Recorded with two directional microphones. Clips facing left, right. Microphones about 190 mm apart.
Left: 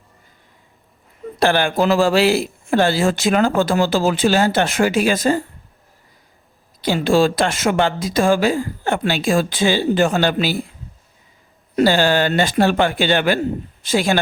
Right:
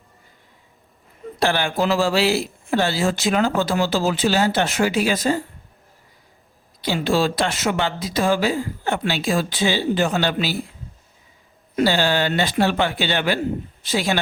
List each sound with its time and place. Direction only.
1.4 s speech: 55° left (ahead or behind)
6.8 s speech: 50° left (ahead or behind)
11.8 s speech: 50° left (ahead or behind)